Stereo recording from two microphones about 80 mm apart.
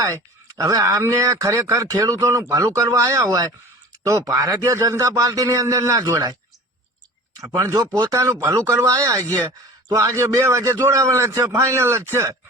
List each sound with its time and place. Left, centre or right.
0.6 s a man's voice: right
6.0 s a man's voice: right
7.5 s a man's voice: right